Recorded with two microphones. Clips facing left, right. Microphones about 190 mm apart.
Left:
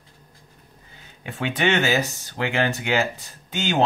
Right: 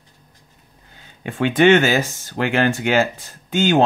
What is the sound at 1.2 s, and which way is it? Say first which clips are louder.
Speech: right 9 dB; 55° right (ahead or behind).